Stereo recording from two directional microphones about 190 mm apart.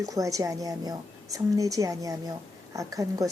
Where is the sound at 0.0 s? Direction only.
15° right (ahead or behind).